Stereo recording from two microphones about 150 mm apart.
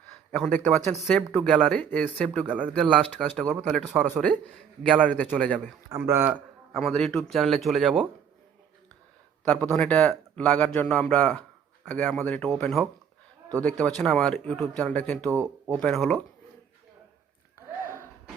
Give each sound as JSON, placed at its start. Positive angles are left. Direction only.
{"t": 0.3, "sound": "speech", "side_deg": 5}
{"t": 5.0, "sound": "speech", "side_deg": 10}
{"t": 5.9, "sound": "speech", "side_deg": -15}
{"t": 6.7, "sound": "speech", "side_deg": 0}
{"t": 9.4, "sound": "speech", "side_deg": 10}
{"t": 15.3, "sound": "speech", "side_deg": -15}
{"t": 15.7, "sound": "speech", "side_deg": 0}